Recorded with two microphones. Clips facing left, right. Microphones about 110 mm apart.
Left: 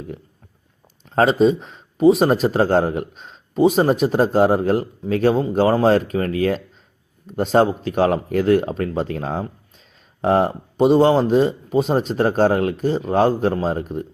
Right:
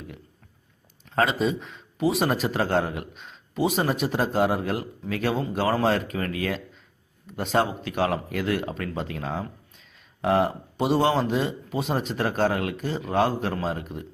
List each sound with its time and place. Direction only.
1.1 s speech: 30° left (ahead or behind)